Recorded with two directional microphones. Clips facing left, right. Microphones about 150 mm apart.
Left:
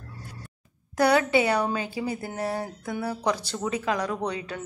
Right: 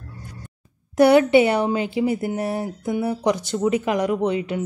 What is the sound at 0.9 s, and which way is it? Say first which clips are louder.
Speech: right 7 dB; 25° right (ahead or behind).